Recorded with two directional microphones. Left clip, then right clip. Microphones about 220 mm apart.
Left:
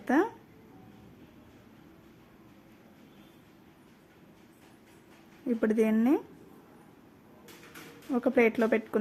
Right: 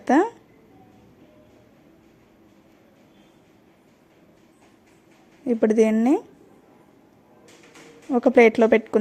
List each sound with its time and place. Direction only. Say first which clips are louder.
0.0 s speech: right 8 dB; 25° right (ahead or behind)
5.5 s speech: right 9 dB; 25° right (ahead or behind)
8.1 s speech: right 10 dB; 25° right (ahead or behind)